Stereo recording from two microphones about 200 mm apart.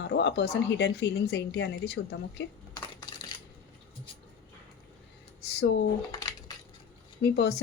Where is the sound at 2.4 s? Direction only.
75° left (ahead or behind).